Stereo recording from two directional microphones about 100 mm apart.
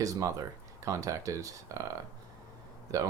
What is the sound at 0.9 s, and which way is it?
Speech, 35° right (ahead or behind).